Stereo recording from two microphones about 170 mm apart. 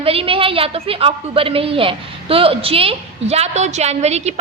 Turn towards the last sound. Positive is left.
turn(degrees=-40)  # may be behind; listen again after turning